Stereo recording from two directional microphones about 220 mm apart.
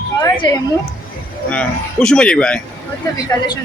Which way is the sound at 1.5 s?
5° left (ahead or behind).